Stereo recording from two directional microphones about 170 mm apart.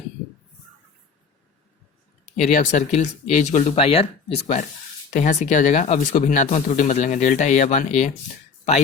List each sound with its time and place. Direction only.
2.2 s speech: 45° left (ahead or behind)